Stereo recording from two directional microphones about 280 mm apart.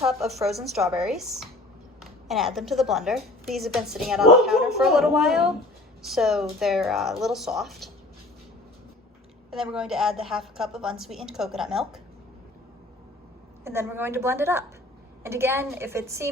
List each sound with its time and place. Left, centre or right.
0.0 s a woman's voice: centre
9.5 s a woman's voice: centre
13.7 s a woman's voice: centre